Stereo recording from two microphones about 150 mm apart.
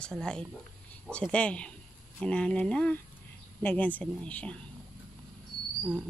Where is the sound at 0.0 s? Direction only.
5° left (ahead or behind).